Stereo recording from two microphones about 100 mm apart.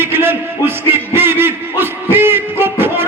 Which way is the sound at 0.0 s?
20° right (ahead or behind).